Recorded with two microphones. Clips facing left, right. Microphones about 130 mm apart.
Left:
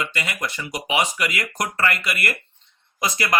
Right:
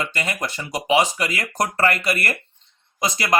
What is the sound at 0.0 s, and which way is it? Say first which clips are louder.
Speech: right 2 dB; 35° right (ahead or behind).